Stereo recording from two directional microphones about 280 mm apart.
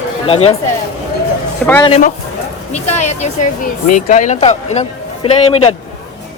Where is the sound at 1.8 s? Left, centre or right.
Left.